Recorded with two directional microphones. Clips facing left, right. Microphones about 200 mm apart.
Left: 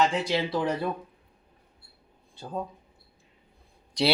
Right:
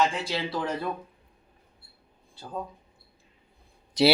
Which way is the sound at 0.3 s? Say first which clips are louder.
Left 4 dB; 15° left (ahead or behind).